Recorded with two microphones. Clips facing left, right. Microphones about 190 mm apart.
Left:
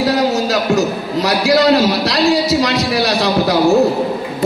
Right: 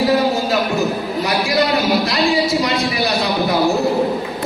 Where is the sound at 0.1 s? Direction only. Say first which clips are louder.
Left 1 dB; 80° left.